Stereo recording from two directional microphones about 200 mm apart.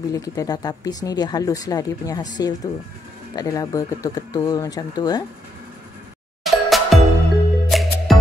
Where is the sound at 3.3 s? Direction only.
20° left (ahead or behind).